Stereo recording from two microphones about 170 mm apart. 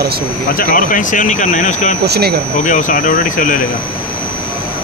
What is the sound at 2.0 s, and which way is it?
Speech, 70° right (ahead or behind).